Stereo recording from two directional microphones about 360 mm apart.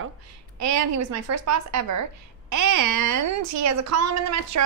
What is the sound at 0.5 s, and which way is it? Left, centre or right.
Speech, right.